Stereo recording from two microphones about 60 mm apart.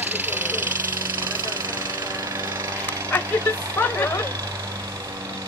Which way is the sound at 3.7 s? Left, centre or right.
Left.